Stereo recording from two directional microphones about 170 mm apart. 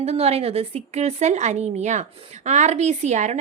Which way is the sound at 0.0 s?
40° right (ahead or behind).